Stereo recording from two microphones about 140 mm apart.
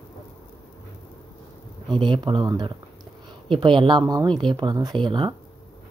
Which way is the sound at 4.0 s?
25° right (ahead or behind).